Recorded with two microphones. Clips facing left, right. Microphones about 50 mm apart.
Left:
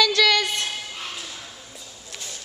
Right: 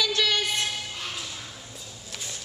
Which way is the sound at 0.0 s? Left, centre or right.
Left.